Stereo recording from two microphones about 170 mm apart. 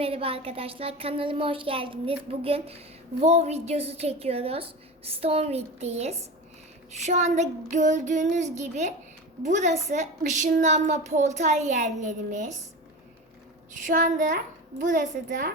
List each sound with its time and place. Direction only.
0.0 s a woman's voice: 35° right (ahead or behind)
13.7 s a child's voice: 50° right (ahead or behind)